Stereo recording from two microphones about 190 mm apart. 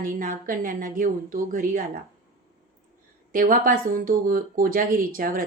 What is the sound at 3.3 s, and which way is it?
A woman's voice, 45° right (ahead or behind).